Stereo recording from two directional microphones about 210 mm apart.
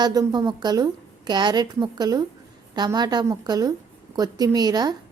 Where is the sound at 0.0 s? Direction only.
20° right (ahead or behind).